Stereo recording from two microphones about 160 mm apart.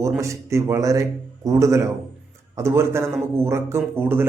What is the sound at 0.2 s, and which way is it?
A man's voice, 20° right (ahead or behind).